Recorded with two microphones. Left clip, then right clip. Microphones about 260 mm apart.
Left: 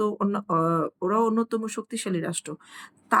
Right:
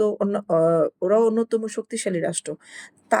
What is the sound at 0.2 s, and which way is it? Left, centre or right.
Speech, centre.